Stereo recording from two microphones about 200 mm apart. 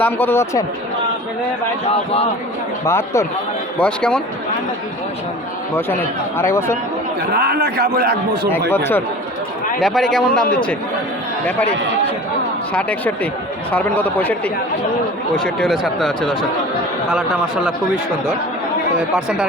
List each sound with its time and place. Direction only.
0.0 s speech: 10° left (ahead or behind)
2.8 s speech: 15° left (ahead or behind)
6.3 s speech: 15° left (ahead or behind)
7.3 s a man's voice: 50° right (ahead or behind)
8.7 s speech: 10° left (ahead or behind)
9.8 s speech: centre (ahead or behind)
12.7 s speech: 5° left (ahead or behind)
19.1 s speech: 5° right (ahead or behind)